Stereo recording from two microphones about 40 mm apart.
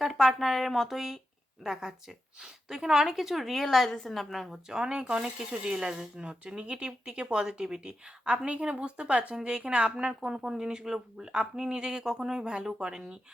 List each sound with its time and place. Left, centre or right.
0.0 s a woman's voice: centre
2.4 s a woman's voice: centre
4.7 s speech: centre